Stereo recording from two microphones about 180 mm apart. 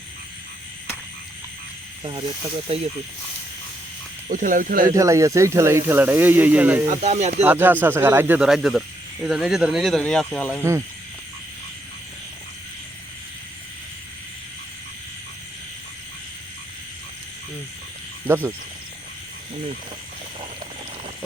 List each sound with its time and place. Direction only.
2.7 s speech: 30° right (ahead or behind)
4.3 s speech: 45° right (ahead or behind)
4.9 s speech: 15° right (ahead or behind)
6.8 s speech: 40° right (ahead or behind)
7.4 s speech: 10° right (ahead or behind); by 10.6 s 5° left (ahead or behind)
10.6 s speech: 15° right (ahead or behind)
18.3 s speech: 10° right (ahead or behind)